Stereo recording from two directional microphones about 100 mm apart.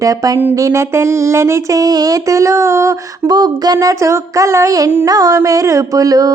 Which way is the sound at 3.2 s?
45° right (ahead or behind).